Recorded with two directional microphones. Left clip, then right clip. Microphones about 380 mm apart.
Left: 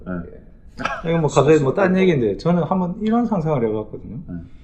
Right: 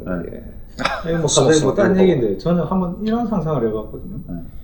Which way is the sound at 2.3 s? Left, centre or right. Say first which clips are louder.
Even; left.